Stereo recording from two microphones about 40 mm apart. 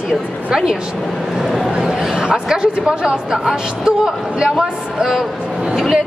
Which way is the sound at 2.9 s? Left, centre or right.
Right.